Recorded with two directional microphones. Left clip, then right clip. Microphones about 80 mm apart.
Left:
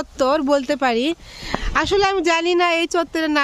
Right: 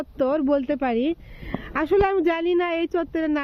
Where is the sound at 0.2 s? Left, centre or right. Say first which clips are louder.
Left 4 dB; left.